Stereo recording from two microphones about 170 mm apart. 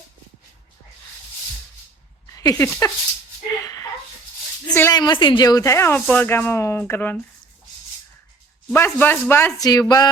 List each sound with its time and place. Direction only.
2.3 s speech: 20° left (ahead or behind)
3.6 s a sound: 20° left (ahead or behind)
4.6 s speech: 15° left (ahead or behind)
4.9 s speech: 25° left (ahead or behind)
8.7 s speech: 10° left (ahead or behind)